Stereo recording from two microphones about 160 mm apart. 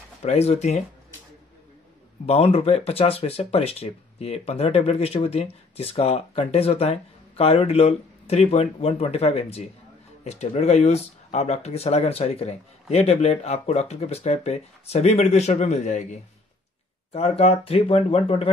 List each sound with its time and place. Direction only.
0.2 s speech: 45° left (ahead or behind)
2.2 s speech: 40° left (ahead or behind)